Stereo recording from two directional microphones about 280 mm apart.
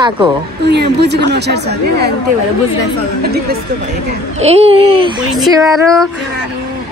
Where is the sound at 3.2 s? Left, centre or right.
Right.